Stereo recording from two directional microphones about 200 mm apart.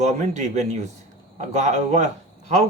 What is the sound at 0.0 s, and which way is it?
Speech, 35° right (ahead or behind).